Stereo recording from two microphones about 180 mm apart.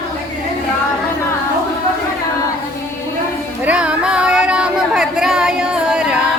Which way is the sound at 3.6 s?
5° right (ahead or behind).